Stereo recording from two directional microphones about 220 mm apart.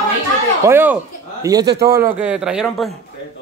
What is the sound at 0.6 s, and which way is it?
Speech, 10° right (ahead or behind).